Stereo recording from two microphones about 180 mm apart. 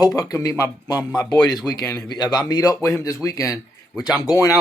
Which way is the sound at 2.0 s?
20° left (ahead or behind).